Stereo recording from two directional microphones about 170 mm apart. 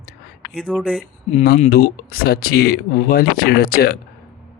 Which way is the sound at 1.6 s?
60° left (ahead or behind).